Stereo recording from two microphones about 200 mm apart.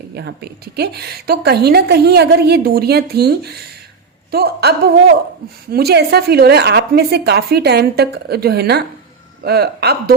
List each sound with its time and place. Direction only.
0.1 s a woman's voice: 55° right (ahead or behind)